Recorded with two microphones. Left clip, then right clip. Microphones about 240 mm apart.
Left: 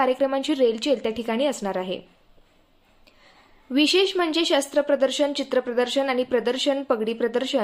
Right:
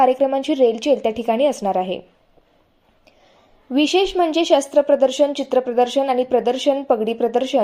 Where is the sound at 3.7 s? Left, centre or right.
Centre.